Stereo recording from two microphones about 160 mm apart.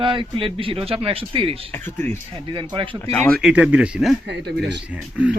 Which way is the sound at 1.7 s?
15° left (ahead or behind).